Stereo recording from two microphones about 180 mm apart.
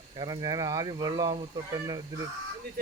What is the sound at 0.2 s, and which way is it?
Speech, 20° right (ahead or behind).